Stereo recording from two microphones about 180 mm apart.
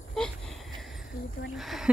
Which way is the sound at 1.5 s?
Centre (ahead or behind).